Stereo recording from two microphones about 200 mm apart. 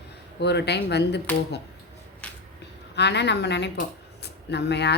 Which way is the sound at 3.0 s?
60° left (ahead or behind).